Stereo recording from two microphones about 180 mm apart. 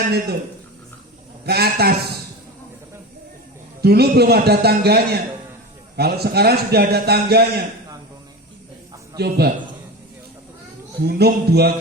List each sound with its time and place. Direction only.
1.5 s a man's voice: 60° right (ahead or behind)
3.8 s a man's voice: 60° right (ahead or behind)
9.1 s a man's voice: 60° right (ahead or behind)
11.0 s a man's voice: 60° right (ahead or behind)